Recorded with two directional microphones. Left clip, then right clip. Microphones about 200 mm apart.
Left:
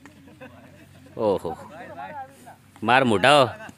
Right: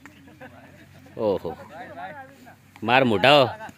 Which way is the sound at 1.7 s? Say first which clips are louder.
Even; 50° left (ahead or behind).